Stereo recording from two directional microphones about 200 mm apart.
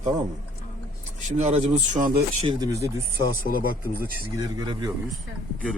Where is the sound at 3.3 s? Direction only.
45° left (ahead or behind).